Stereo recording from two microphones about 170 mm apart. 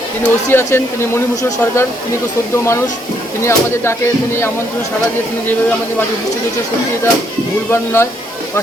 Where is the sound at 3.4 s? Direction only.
15° left (ahead or behind).